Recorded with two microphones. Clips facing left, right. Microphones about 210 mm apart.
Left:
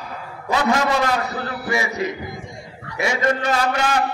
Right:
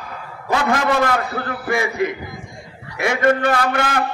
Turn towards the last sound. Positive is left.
turn(degrees=-55)  # may be behind; listen again after turning